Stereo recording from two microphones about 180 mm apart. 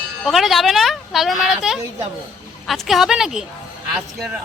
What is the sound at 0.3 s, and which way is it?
Speech, centre (ahead or behind).